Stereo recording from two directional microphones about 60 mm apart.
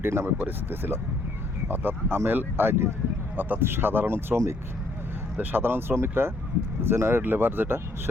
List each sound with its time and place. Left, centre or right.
0.0 s speech: right
5.4 s speech: right